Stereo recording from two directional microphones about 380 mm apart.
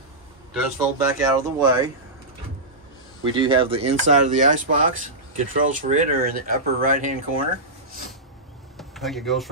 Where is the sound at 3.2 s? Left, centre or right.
Centre.